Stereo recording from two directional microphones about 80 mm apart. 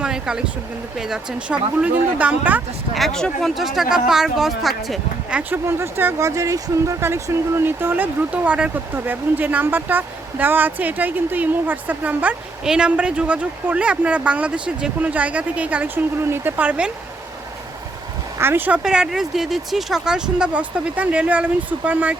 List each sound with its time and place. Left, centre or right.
0.0 s speech: centre
2.9 s speech: centre
5.3 s speech: centre
5.6 s a woman's voice: right
6.1 s a woman's voice: right; by 16.9 s centre
18.3 s a woman's voice: right
18.8 s speech: centre